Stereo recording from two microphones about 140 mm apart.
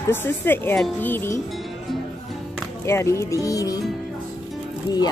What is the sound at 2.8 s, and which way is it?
Speech, 20° left (ahead or behind).